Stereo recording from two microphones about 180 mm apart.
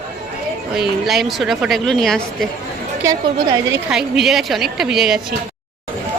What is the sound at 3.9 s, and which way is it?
Speech, 5° right (ahead or behind).